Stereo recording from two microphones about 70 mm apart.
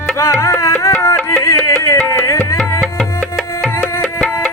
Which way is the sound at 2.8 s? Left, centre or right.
Centre.